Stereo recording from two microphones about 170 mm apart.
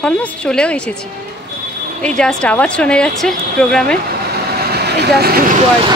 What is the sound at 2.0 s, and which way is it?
A woman's voice, 5° left (ahead or behind).